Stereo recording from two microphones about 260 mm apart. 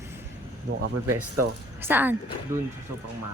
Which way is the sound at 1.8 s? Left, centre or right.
Centre.